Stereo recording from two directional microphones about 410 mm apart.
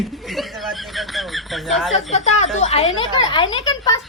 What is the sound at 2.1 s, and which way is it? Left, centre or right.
A woman's voice, centre.